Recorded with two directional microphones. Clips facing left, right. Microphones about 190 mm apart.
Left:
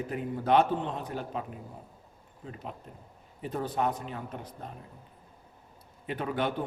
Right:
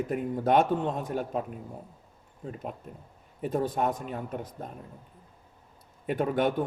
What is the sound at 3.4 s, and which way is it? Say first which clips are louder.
A man's voice: right 3 dB; 50° right (ahead or behind).